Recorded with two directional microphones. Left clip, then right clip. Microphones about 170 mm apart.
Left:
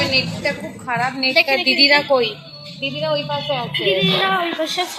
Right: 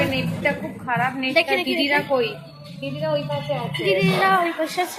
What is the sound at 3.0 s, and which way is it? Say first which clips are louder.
Speech: left 2 dB; 45° left (ahead or behind).